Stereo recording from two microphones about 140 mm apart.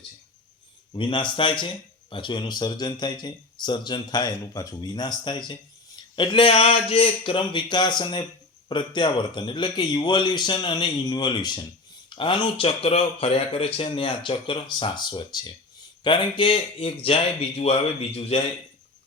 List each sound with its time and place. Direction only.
0.9 s speech: 35° left (ahead or behind)